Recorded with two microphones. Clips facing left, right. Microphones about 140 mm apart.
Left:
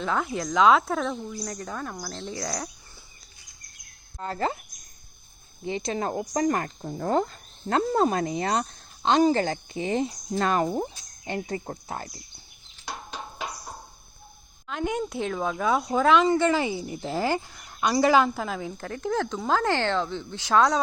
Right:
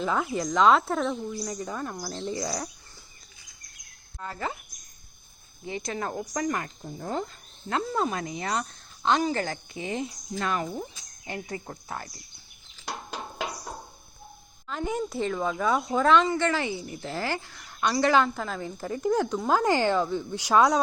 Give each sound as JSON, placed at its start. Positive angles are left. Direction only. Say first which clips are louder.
{"t": 0.0, "sound": "speech", "louder": "even", "side_deg": -5}
{"t": 4.2, "sound": "speech", "louder": "left 5 dB", "side_deg": 30}
{"t": 5.6, "sound": "speech", "louder": "left 4 dB", "side_deg": 25}
{"t": 11.3, "sound": "speech", "louder": "left 5 dB", "side_deg": 30}
{"t": 14.7, "sound": "speech", "louder": "left 1 dB", "side_deg": 0}
{"t": 16.2, "sound": "a woman's voice", "louder": "left 4 dB", "side_deg": 15}
{"t": 18.8, "sound": "speech", "louder": "right 4 dB", "side_deg": -5}